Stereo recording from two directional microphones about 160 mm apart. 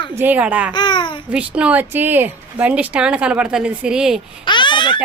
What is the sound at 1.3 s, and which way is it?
Speech, 5° right (ahead or behind).